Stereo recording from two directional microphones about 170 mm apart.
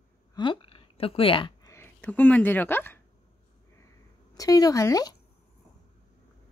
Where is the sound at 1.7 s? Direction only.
10° left (ahead or behind).